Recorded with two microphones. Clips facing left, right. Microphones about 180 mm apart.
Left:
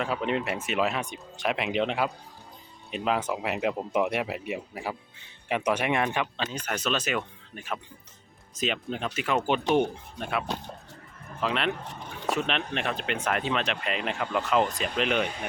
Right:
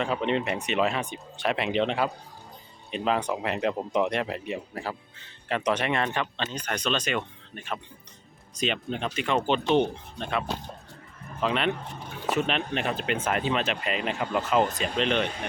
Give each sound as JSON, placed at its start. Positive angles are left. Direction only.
{"t": 0.0, "sound": "speech", "side_deg": 5}